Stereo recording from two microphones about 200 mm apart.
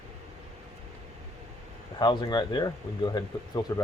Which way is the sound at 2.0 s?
20° left (ahead or behind).